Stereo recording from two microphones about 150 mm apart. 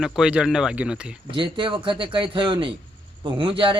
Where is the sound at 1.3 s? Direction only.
35° right (ahead or behind).